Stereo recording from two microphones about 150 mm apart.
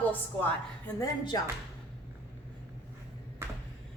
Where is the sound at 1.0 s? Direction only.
25° left (ahead or behind).